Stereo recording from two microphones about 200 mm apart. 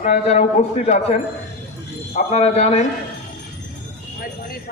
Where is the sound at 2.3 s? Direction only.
30° left (ahead or behind).